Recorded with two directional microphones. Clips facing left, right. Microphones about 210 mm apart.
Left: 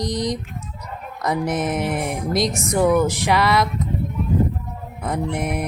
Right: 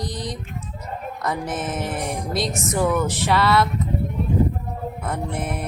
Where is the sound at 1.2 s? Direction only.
15° left (ahead or behind).